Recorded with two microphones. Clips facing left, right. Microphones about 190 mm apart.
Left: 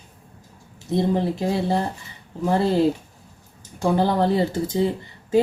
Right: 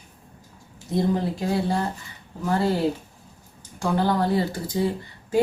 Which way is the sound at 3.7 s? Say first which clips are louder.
Left 3 dB; 20° left (ahead or behind).